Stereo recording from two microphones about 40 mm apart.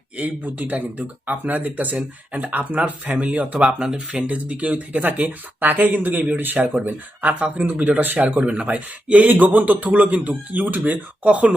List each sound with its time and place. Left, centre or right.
0.2 s a man's voice: right
3.8 s speech: centre
4.3 s a man's voice: right
6.8 s a man's voice: right
11.3 s a man's voice: right